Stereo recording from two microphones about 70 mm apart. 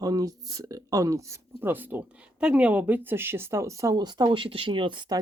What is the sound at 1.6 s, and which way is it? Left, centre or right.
Speech, right.